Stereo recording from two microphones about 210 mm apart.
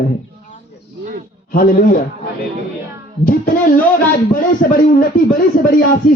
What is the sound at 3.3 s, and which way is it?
Speech, 40° left (ahead or behind).